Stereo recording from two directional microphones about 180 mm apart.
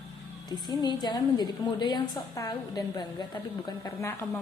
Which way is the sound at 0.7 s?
25° left (ahead or behind).